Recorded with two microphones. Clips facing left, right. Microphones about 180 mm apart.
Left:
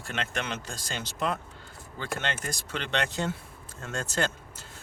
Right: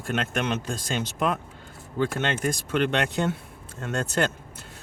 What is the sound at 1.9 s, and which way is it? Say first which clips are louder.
Speech: right 7 dB; 50° right (ahead or behind).